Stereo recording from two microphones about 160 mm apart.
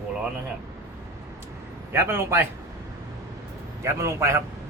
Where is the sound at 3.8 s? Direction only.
15° right (ahead or behind).